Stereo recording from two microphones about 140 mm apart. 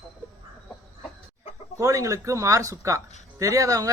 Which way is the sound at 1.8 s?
25° right (ahead or behind).